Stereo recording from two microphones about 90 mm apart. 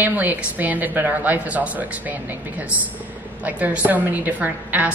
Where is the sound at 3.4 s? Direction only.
15° right (ahead or behind).